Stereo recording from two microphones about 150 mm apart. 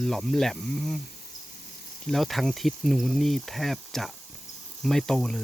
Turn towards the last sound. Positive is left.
turn(degrees=5)  # may be behind; listen again after turning